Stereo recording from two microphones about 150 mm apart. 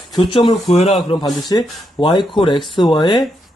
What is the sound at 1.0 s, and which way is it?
Speech, 30° left (ahead or behind).